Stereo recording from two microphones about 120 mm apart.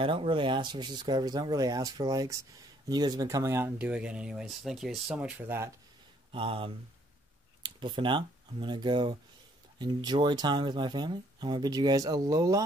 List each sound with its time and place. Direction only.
0.0 s speech: 45° right (ahead or behind); by 3.7 s 20° right (ahead or behind)
3.7 s speech: 10° right (ahead or behind)
5.5 s speech: 20° right (ahead or behind)
6.3 s speech: 45° right (ahead or behind); by 12.6 s 30° right (ahead or behind)